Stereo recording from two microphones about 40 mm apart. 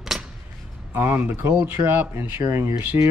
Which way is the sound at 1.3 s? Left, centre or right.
Right.